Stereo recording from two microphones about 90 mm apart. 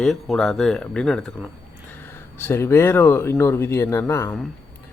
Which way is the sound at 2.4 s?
30° left (ahead or behind).